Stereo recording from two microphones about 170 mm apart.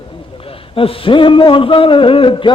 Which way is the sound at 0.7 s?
30° left (ahead or behind).